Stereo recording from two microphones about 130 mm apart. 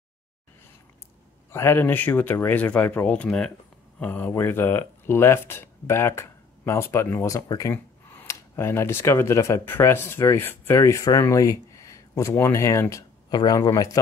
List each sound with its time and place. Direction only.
1.5 s speech: 20° left (ahead or behind)